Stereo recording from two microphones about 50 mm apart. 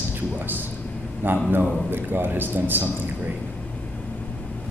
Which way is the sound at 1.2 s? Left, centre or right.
Right.